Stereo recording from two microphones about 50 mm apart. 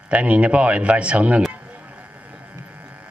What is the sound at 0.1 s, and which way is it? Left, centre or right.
A man's voice, right.